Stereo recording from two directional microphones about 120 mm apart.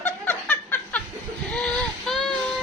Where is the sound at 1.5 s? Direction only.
5° left (ahead or behind).